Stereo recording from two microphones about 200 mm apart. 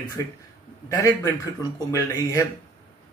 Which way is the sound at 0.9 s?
15° left (ahead or behind).